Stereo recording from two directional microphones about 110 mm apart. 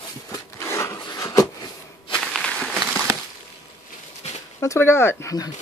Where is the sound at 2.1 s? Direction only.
5° left (ahead or behind).